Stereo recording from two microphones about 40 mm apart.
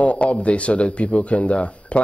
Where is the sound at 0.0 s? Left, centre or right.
Left.